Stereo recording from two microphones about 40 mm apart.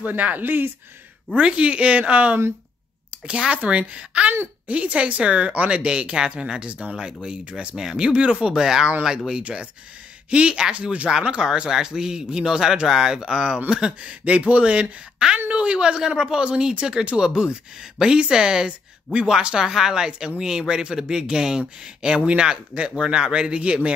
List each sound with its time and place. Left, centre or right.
0.0 s speech: right
1.3 s a woman's voice: right
5.9 s speech: right
8.1 s speech: right
11.2 s speech: right
14.2 s speech: right